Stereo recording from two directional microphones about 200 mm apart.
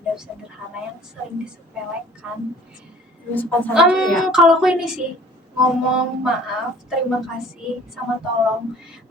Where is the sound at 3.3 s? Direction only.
10° left (ahead or behind).